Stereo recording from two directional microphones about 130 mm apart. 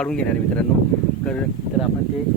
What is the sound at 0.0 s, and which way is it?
Speech, 10° left (ahead or behind).